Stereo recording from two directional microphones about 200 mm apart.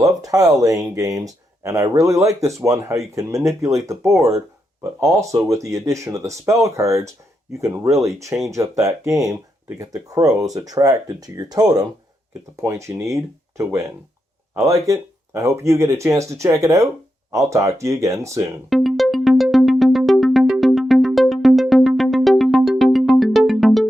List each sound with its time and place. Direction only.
0.0 s speech: 15° right (ahead or behind)
18.7 s music: centre (ahead or behind)